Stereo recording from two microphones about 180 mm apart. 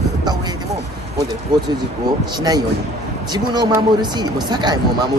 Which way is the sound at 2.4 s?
20° right (ahead or behind).